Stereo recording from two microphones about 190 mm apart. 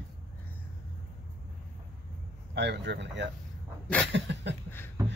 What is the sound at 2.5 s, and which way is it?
Speech, 65° right (ahead or behind).